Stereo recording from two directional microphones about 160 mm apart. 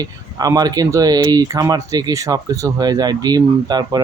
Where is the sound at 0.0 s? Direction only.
25° right (ahead or behind).